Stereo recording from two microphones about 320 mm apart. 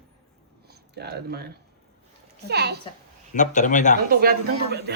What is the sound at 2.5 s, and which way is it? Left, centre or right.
Speech, right.